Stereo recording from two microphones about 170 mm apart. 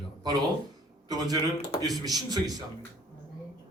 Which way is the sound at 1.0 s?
20° right (ahead or behind).